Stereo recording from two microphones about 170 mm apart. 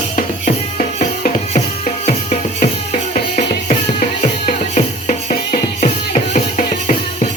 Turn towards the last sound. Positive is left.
turn(degrees=45)  # may be behind; listen again after turning